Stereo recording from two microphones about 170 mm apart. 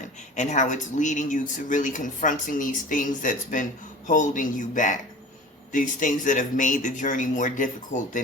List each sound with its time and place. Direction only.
0.3 s speech: 45° left (ahead or behind)